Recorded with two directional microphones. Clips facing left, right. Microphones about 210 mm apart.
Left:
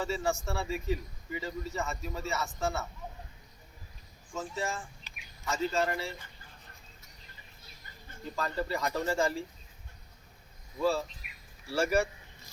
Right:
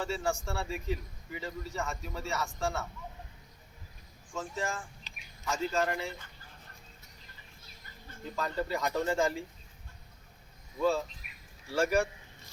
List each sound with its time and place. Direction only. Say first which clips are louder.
0.0 s speech: left 1 dB; 5° left (ahead or behind)
4.4 s speech: even; 5° left (ahead or behind)
8.4 s speech: even; centre (ahead or behind)
10.8 s speech: even; centre (ahead or behind)